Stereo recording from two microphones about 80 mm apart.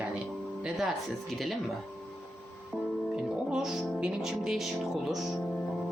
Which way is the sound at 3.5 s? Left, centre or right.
Centre.